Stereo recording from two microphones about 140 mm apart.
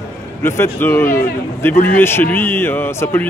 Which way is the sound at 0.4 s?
15° left (ahead or behind).